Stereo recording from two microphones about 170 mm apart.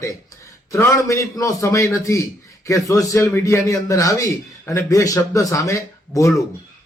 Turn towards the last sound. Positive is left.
turn(degrees=20)  # may be behind; listen again after turning